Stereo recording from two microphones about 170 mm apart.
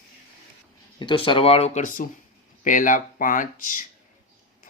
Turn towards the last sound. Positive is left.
turn(degrees=50)  # may be behind; listen again after turning